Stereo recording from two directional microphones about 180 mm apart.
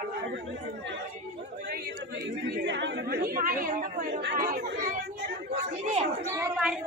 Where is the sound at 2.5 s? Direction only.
75° right (ahead or behind); by 5.0 s 50° right (ahead or behind).